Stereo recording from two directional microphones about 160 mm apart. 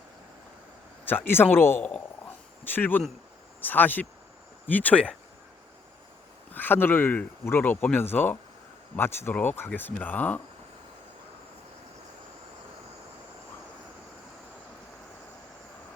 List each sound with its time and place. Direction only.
1.0 s speech: 10° left (ahead or behind)
6.5 s speech: 10° left (ahead or behind)